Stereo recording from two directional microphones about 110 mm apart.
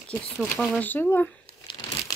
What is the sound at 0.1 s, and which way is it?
Speech, 10° left (ahead or behind).